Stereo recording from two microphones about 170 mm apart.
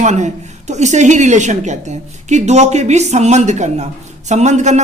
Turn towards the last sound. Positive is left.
turn(degrees=-45)  # may be behind; listen again after turning